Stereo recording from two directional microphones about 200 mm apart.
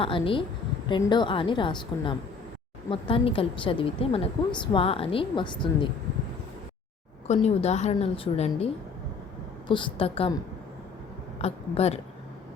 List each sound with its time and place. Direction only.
0.0 s a woman's voice: 25° left (ahead or behind)
7.3 s a woman's voice: 35° left (ahead or behind)
11.3 s a woman's voice: 30° left (ahead or behind)